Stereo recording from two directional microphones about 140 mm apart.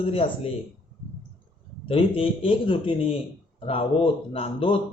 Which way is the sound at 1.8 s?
40° left (ahead or behind).